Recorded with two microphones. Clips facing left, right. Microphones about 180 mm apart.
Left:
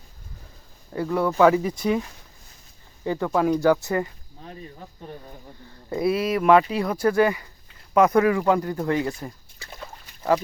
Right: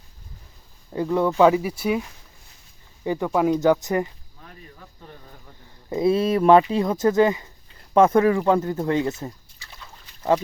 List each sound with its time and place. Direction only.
0.9 s speech: 20° right (ahead or behind)
3.0 s speech: 15° right (ahead or behind)
4.4 s speech: 25° left (ahead or behind)
5.9 s speech: 25° right (ahead or behind)